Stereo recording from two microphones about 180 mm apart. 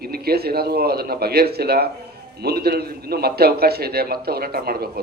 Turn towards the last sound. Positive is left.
turn(degrees=-60)  # may be behind; listen again after turning